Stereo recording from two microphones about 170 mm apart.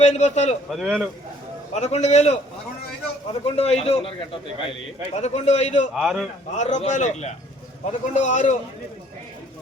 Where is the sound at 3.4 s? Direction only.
40° left (ahead or behind).